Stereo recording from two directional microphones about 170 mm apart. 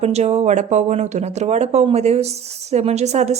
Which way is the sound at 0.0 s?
40° right (ahead or behind).